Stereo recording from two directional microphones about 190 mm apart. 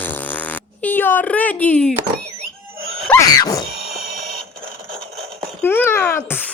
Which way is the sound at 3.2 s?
20° left (ahead or behind).